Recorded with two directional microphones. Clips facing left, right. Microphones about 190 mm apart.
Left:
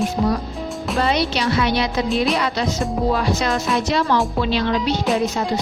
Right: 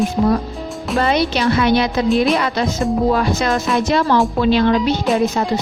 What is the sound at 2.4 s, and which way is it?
Speech, 55° right (ahead or behind).